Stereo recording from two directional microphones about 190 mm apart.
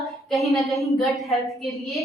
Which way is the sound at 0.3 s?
Centre (ahead or behind).